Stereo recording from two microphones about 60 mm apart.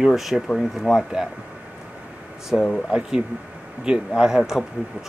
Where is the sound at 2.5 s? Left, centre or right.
Centre.